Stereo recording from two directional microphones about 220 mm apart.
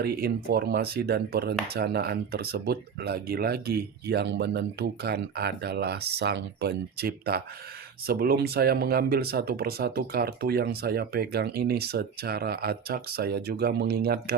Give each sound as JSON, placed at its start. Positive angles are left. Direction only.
{"t": 0.0, "sound": "speech", "side_deg": -45}